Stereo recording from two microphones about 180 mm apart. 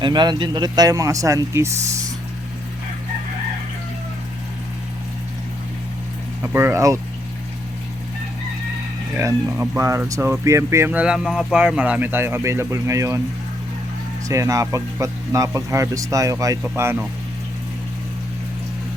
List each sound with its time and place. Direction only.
0.0 s speech: 25° right (ahead or behind)
6.4 s speech: 10° right (ahead or behind)
9.1 s speech: 15° right (ahead or behind)
14.3 s speech: 15° right (ahead or behind)